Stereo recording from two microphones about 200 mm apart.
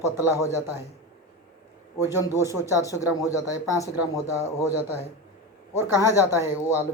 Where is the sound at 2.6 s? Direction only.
15° left (ahead or behind).